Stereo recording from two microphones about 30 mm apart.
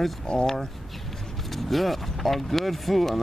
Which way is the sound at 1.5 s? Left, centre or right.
Centre.